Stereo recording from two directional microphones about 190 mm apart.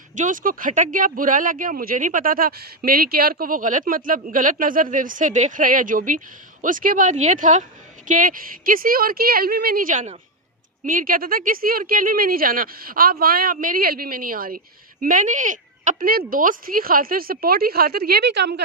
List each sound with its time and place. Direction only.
0.2 s speech: 45° right (ahead or behind); by 18.6 s 65° right (ahead or behind)